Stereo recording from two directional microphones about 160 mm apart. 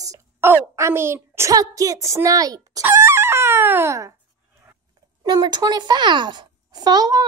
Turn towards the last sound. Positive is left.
turn(degrees=-25)  # may be behind; listen again after turning